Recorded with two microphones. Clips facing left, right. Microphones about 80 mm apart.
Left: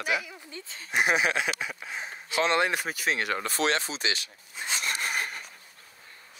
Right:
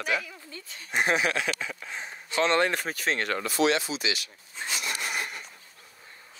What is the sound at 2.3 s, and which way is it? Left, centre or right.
Speech, centre.